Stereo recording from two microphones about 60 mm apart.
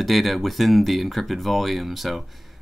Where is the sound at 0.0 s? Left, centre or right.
Centre.